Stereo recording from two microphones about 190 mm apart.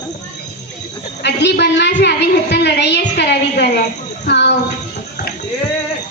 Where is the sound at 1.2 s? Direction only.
60° left (ahead or behind).